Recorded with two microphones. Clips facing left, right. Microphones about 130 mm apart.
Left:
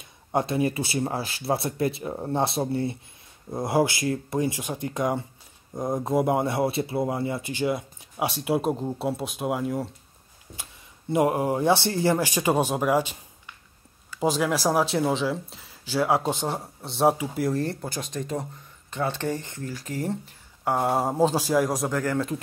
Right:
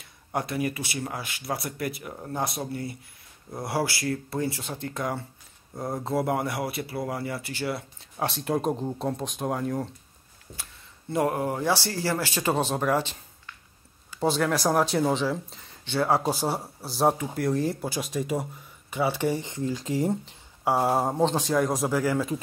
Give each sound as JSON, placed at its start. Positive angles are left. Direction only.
{"t": 0.0, "sound": "speech", "side_deg": 25}
{"t": 10.5, "sound": "speech", "side_deg": 15}
{"t": 20.6, "sound": "speech", "side_deg": -5}